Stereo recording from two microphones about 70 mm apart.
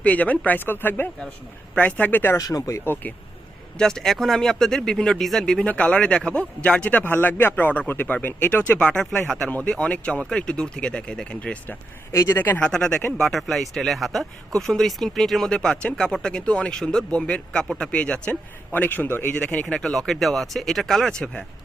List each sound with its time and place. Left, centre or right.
0.0 s speech: left
2.4 s speech: left
2.8 s speech: left
3.8 s speech: centre
6.9 s speech: left
8.9 s speech: centre
12.3 s speech: left
12.6 s speech: centre
19.6 s speech: centre